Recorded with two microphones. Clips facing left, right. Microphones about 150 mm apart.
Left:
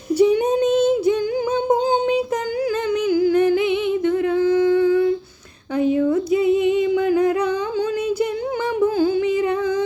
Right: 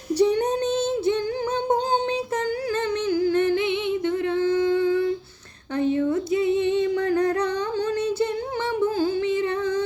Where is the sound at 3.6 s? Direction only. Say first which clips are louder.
Left 4 dB; 25° right (ahead or behind).